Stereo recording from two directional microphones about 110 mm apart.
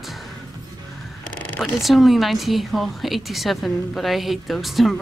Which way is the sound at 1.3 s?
15° left (ahead or behind).